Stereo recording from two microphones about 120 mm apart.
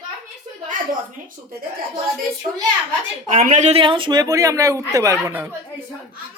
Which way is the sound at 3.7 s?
45° right (ahead or behind).